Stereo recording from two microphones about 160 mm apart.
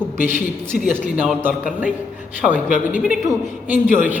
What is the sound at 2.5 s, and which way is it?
Speech, 55° left (ahead or behind).